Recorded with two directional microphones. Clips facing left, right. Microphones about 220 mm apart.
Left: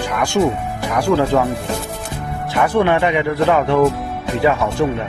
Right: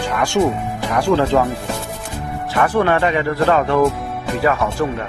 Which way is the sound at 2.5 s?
15° left (ahead or behind).